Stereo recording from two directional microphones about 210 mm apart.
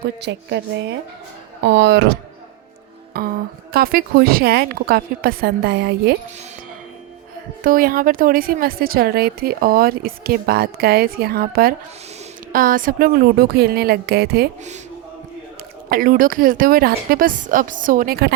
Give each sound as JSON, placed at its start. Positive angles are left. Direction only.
{"t": 0.0, "sound": "a woman's voice", "side_deg": -55}
{"t": 3.1, "sound": "a woman's voice", "side_deg": -45}
{"t": 7.6, "sound": "a woman's voice", "side_deg": -40}
{"t": 15.9, "sound": "a woman's voice", "side_deg": -40}